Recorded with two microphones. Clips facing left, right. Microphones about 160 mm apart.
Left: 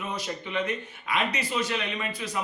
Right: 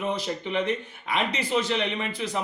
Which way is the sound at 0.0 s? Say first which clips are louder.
Right 5 dB; 30° right (ahead or behind).